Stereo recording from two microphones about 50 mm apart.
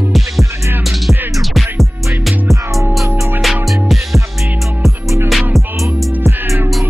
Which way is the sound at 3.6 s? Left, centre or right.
Centre.